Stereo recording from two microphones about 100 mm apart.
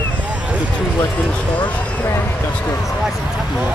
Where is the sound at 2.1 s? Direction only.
20° left (ahead or behind).